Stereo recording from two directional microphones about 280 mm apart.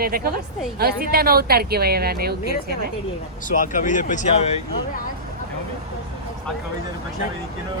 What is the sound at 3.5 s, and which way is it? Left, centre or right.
Speech, left.